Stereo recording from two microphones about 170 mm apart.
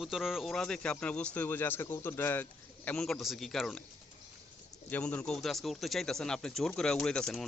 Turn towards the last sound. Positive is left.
turn(degrees=5)  # may be behind; listen again after turning